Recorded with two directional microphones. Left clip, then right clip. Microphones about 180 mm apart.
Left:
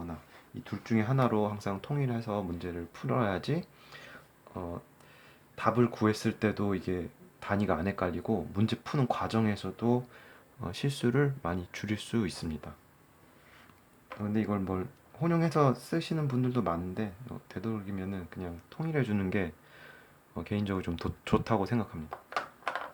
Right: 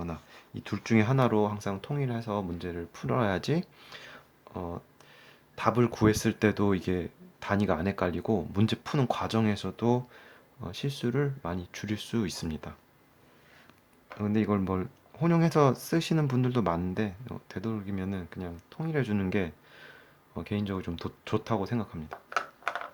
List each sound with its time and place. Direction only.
0.0 s speech: 30° right (ahead or behind)
10.6 s speech: centre (ahead or behind); by 12.7 s 15° right (ahead or behind)
14.2 s speech: 20° right (ahead or behind); by 21.8 s centre (ahead or behind)